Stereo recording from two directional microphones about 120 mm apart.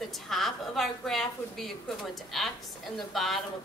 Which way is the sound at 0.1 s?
Centre (ahead or behind).